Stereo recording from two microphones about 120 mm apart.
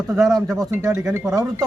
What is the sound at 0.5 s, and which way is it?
Speech, 20° right (ahead or behind).